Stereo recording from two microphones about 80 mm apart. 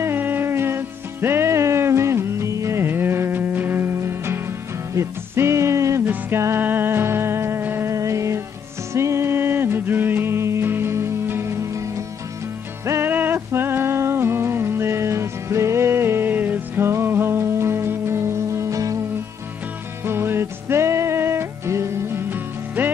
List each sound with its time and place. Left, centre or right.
0.0 s music: right
7.9 s music: right
13.1 s music: right
20.1 s music: right